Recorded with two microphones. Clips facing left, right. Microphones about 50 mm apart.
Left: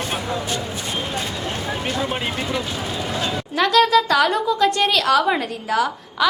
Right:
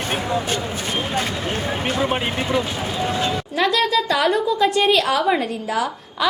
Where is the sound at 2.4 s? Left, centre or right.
Right.